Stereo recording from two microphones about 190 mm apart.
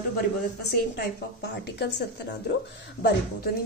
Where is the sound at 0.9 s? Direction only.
60° left (ahead or behind).